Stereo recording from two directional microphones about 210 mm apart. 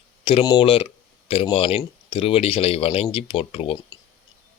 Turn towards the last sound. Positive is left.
turn(degrees=25)  # may be behind; listen again after turning